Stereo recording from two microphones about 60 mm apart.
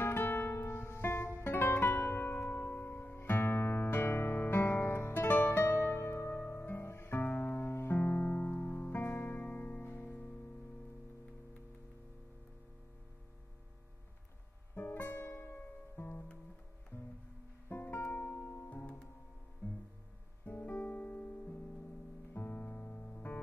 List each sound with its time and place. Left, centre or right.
0.0 s music: left
2.4 s music: left
2.7 s music: left
14.9 s music: left
16.9 s music: left
17.6 s music: left
18.4 s music: left
20.4 s music: left